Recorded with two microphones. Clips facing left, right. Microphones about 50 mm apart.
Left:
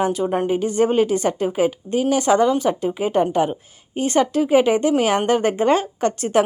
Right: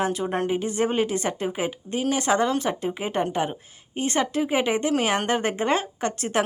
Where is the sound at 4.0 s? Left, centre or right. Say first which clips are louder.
Left 6 dB; right.